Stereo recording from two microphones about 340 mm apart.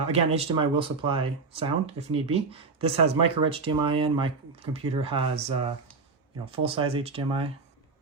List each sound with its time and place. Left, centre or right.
0.1 s speech: centre